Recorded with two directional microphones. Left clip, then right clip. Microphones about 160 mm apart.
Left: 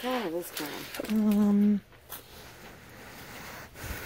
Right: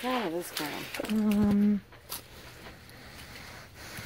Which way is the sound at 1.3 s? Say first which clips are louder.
Left 2 dB; 25° left (ahead or behind).